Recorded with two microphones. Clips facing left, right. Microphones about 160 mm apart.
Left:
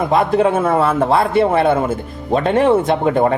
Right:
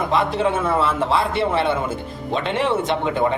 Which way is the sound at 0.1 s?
50° left (ahead or behind).